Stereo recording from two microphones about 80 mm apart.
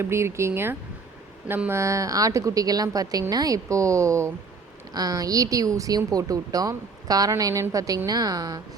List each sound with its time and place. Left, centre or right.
0.0 s speech: right
1.8 s speech: right
4.9 s speech: right